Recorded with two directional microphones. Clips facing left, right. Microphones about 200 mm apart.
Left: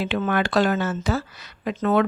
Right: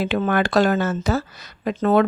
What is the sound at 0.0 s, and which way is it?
A woman's voice, 45° right (ahead or behind).